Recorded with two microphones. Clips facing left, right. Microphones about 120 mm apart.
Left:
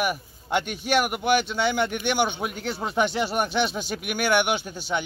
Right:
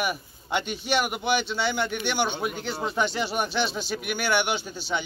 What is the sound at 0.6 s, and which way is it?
Speech, 50° left (ahead or behind).